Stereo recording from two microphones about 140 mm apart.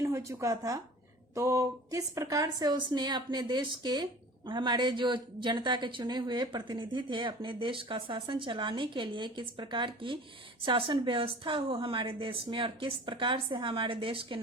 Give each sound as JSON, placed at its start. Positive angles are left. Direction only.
{"t": 0.0, "sound": "a woman's voice", "side_deg": -20}